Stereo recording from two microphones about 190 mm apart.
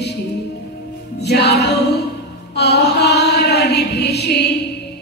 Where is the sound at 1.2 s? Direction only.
60° left (ahead or behind).